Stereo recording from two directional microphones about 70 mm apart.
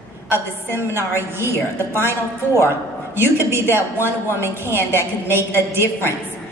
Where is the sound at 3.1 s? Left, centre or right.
Right.